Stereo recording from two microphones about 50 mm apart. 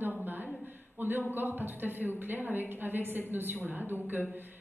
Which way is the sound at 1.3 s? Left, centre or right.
Right.